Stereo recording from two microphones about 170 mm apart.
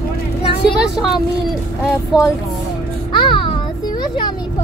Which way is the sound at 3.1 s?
30° left (ahead or behind).